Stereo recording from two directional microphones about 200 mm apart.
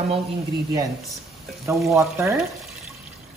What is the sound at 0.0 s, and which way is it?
Speech, 30° right (ahead or behind).